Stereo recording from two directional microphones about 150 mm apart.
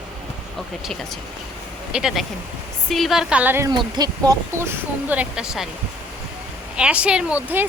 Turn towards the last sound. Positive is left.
turn(degrees=-10)  # may be behind; listen again after turning